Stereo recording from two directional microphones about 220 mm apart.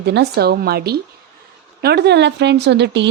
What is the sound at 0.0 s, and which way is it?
A woman's voice, 50° right (ahead or behind).